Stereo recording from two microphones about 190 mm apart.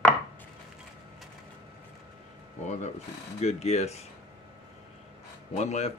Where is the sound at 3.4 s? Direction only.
35° left (ahead or behind).